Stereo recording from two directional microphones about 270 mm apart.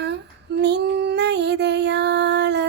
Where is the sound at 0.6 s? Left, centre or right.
Right.